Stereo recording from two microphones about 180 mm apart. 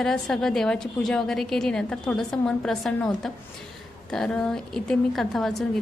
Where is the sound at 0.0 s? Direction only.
5° left (ahead or behind).